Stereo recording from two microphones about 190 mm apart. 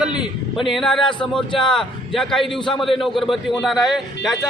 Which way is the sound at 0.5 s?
Centre (ahead or behind).